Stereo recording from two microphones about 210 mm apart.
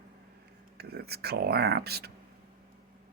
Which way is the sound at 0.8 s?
50° right (ahead or behind).